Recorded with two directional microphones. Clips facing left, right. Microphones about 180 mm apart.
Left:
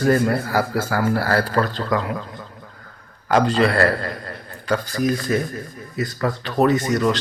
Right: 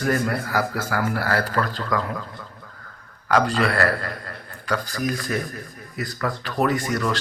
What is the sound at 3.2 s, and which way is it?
A man's voice, 25° left (ahead or behind).